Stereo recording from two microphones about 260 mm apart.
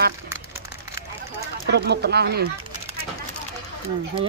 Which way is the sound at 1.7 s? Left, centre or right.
Right.